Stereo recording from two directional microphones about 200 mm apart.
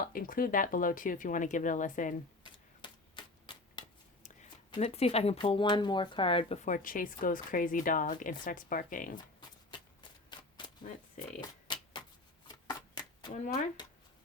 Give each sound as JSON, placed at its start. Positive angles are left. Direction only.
{"t": 0.0, "sound": "speech", "side_deg": 45}
{"t": 2.4, "sound": "typewriter", "side_deg": 25}
{"t": 4.7, "sound": "speech", "side_deg": 30}
{"t": 9.4, "sound": "shuffling cards", "side_deg": 20}
{"t": 11.7, "sound": "tick-tock", "side_deg": 20}
{"t": 12.5, "sound": "shuffling cards", "side_deg": 20}